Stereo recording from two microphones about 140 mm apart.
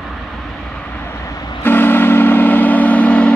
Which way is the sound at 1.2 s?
20° left (ahead or behind).